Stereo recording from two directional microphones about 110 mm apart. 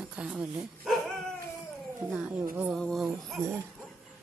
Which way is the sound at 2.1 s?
10° right (ahead or behind).